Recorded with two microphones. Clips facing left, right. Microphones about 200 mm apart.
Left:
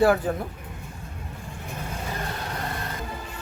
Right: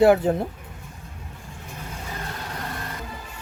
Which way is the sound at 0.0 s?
25° right (ahead or behind).